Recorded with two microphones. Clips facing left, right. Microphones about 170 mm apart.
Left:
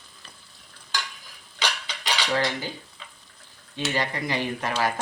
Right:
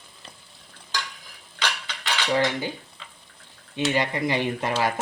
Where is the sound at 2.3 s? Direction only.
15° right (ahead or behind).